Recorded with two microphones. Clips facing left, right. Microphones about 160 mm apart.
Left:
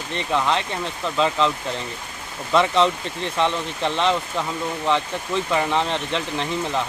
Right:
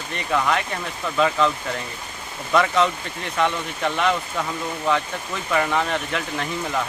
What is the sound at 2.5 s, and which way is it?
Speech, 25° left (ahead or behind).